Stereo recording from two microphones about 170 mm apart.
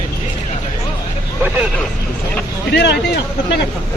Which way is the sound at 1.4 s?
10° right (ahead or behind).